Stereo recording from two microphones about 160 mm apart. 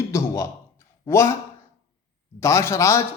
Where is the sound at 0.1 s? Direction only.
20° left (ahead or behind).